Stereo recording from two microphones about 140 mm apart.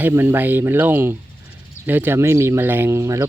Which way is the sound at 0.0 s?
15° right (ahead or behind).